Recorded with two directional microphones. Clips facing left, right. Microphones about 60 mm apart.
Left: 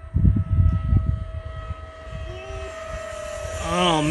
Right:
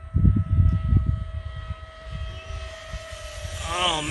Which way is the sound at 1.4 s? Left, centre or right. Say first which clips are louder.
Left 4 dB; centre.